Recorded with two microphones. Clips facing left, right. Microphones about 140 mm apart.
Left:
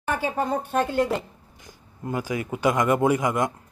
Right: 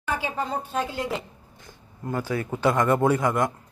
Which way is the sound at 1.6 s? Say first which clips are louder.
Left 1 dB; 15° left (ahead or behind).